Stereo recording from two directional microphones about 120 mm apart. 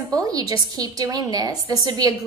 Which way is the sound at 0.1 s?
30° right (ahead or behind).